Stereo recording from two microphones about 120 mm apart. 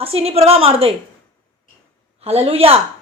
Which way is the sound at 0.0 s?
55° right (ahead or behind).